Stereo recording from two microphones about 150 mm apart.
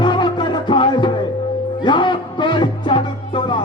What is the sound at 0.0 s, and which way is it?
Music, 30° left (ahead or behind).